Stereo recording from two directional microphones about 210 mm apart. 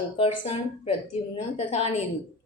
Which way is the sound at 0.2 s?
30° left (ahead or behind).